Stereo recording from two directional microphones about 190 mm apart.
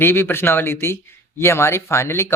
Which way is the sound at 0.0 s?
10° left (ahead or behind).